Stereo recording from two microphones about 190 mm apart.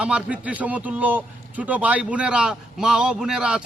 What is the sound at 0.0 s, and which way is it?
A man's voice, 5° right (ahead or behind).